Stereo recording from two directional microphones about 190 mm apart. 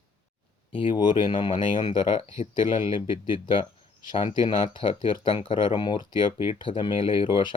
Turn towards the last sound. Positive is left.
turn(degrees=25)  # may be behind; listen again after turning